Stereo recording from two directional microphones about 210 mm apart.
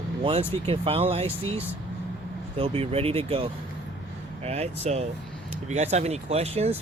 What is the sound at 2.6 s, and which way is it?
Speech, 25° right (ahead or behind).